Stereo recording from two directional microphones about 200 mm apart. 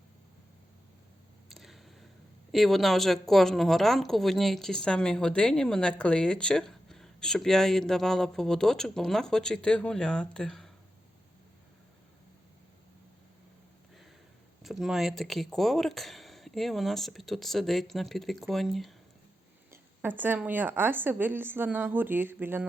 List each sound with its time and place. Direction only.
1.5 s a sound: centre (ahead or behind)
2.5 s speech: centre (ahead or behind)
14.6 s speech: centre (ahead or behind)
19.7 s a woman's voice: 10° right (ahead or behind)